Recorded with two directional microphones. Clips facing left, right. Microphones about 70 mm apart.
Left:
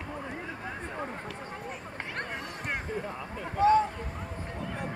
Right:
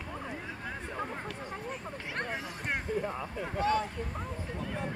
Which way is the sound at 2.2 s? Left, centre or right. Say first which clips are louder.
Right 2 dB; centre.